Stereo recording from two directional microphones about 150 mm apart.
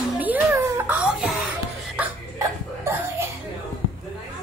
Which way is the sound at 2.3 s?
15° right (ahead or behind).